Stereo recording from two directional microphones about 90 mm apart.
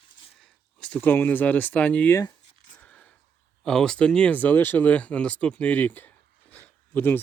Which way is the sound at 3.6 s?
5° left (ahead or behind).